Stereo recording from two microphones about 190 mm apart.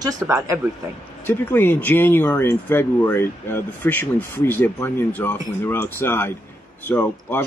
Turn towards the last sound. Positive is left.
turn(degrees=10)  # may be behind; listen again after turning